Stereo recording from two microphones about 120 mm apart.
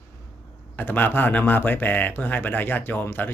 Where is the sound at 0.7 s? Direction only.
15° left (ahead or behind).